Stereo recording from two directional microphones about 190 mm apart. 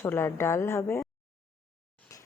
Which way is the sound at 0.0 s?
10° left (ahead or behind).